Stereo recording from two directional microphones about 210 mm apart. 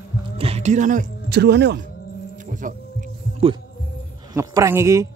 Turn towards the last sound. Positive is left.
turn(degrees=-15)  # may be behind; listen again after turning